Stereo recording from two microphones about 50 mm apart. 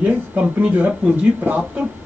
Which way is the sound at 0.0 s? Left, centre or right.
Right.